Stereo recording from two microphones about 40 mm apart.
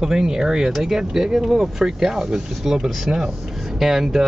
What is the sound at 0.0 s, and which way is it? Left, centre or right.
Speech, centre.